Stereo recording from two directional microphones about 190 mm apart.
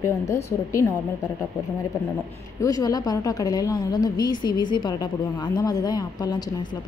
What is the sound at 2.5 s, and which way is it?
A woman's voice, 20° left (ahead or behind).